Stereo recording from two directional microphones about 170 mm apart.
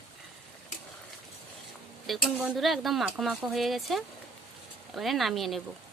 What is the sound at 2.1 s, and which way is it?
Speech, 5° right (ahead or behind).